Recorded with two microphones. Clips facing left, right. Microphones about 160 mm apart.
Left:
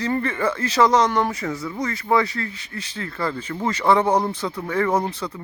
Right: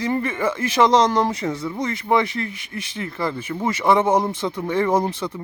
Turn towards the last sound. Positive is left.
turn(degrees=-25)  # may be behind; listen again after turning